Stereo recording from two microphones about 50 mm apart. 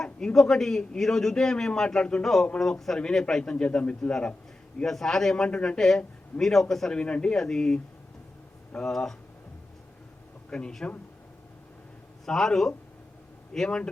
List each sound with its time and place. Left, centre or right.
0.0 s a man's voice: centre
6.9 s a man's voice: left
10.5 s a man's voice: centre
12.2 s a man's voice: centre